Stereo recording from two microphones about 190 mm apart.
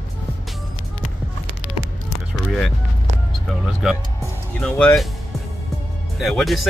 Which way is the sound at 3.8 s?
5° right (ahead or behind).